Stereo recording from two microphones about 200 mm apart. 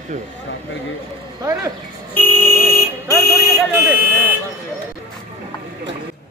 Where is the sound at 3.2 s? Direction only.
15° left (ahead or behind).